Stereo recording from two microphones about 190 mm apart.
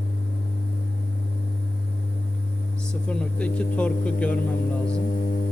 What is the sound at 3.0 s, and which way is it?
Speech, 5° left (ahead or behind).